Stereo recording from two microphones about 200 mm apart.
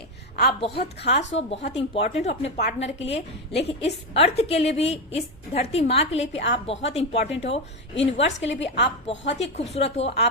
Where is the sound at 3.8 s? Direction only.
30° left (ahead or behind).